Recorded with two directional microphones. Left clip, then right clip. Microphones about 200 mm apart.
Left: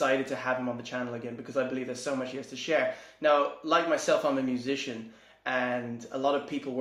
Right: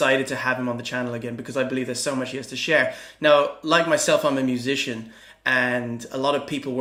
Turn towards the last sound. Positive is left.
turn(degrees=-30)  # may be behind; listen again after turning